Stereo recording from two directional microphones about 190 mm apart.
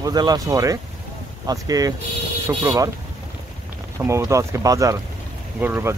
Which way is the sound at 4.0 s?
15° right (ahead or behind).